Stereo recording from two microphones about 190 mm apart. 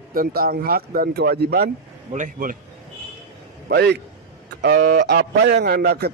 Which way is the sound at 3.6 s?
60° right (ahead or behind).